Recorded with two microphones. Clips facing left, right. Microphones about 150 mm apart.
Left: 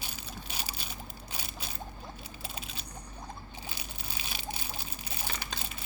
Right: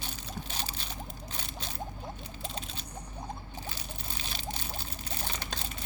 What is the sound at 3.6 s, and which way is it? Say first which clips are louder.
Pour: right 2 dB; 10° left (ahead or behind).